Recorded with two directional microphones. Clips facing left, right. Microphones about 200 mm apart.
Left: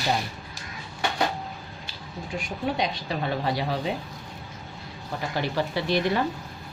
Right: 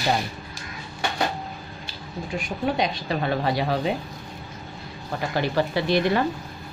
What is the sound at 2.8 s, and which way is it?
Speech, 70° right (ahead or behind).